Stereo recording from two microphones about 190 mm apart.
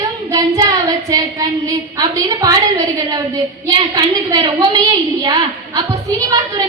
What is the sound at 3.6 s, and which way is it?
A woman's voice, 20° right (ahead or behind).